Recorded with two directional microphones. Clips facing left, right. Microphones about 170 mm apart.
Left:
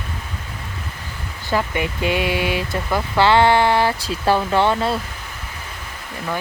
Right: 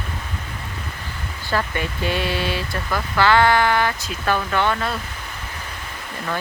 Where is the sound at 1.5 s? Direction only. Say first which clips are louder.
Left 3 dB; 15° left (ahead or behind).